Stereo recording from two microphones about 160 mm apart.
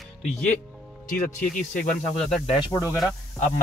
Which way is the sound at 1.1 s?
55° left (ahead or behind).